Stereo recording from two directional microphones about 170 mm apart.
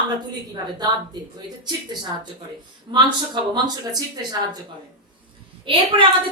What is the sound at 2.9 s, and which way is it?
A woman's voice, 30° right (ahead or behind).